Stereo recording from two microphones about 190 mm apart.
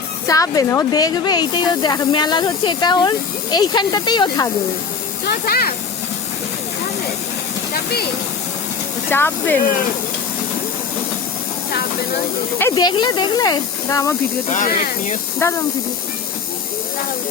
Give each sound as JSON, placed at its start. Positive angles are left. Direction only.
{"t": 0.3, "sound": "speech", "side_deg": 15}
{"t": 5.3, "sound": "speech", "side_deg": 55}
{"t": 7.7, "sound": "speech", "side_deg": 55}
{"t": 9.0, "sound": "speech", "side_deg": 10}
{"t": 12.5, "sound": "speech", "side_deg": 15}
{"t": 14.5, "sound": "speech", "side_deg": 40}
{"t": 15.4, "sound": "speech", "side_deg": 15}